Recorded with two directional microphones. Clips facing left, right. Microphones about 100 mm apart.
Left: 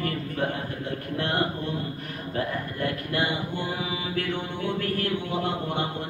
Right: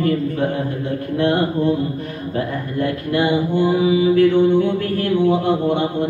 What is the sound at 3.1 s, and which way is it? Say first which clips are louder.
Speech: right 10 dB; 20° right (ahead or behind).